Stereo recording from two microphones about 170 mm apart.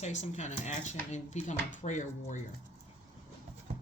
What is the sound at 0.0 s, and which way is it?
Speech, 45° left (ahead or behind).